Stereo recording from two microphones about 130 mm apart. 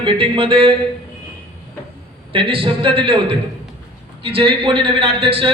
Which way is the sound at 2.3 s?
45° right (ahead or behind).